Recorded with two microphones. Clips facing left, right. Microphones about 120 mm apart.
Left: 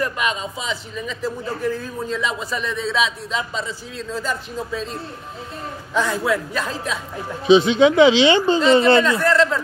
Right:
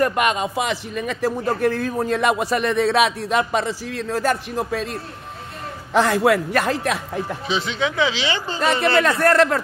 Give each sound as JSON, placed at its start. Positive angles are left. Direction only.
{"t": 0.0, "sound": "a man's voice", "side_deg": -60}
{"t": 5.9, "sound": "a man's voice", "side_deg": -75}
{"t": 7.4, "sound": "speech", "side_deg": 20}
{"t": 9.0, "sound": "a man's voice", "side_deg": -60}